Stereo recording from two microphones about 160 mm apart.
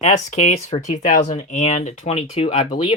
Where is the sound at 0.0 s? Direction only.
45° left (ahead or behind).